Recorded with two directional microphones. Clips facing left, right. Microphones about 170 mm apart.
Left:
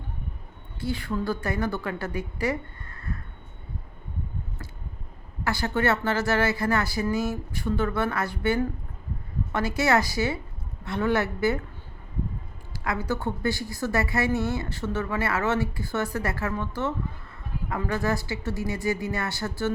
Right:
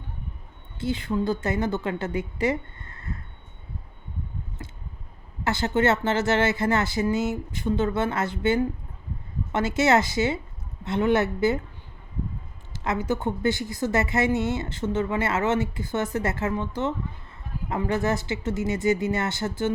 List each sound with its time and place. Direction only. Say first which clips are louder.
0.8 s a woman's voice: right 3 dB; 20° right (ahead or behind)
5.4 s a woman's voice: right 3 dB; 20° right (ahead or behind)
12.7 s a woman's voice: right 2 dB; 20° right (ahead or behind)